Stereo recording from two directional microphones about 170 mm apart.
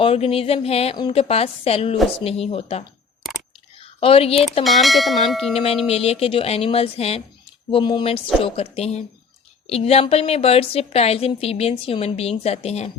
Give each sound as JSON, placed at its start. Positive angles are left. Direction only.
{"t": 0.0, "sound": "a woman's voice", "side_deg": 35}
{"t": 3.8, "sound": "a sound", "side_deg": 35}
{"t": 4.6, "sound": "church bell", "side_deg": 0}
{"t": 5.5, "sound": "a woman's voice", "side_deg": 35}